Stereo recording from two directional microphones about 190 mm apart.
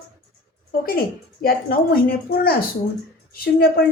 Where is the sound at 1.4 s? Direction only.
50° left (ahead or behind).